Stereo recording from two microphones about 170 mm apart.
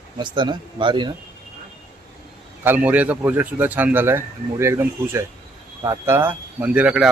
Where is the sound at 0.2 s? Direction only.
25° right (ahead or behind).